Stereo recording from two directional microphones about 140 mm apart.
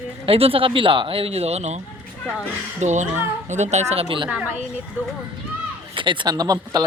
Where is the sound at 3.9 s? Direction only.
40° right (ahead or behind).